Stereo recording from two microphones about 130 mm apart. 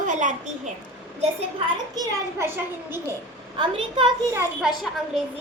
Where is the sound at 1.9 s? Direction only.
20° right (ahead or behind).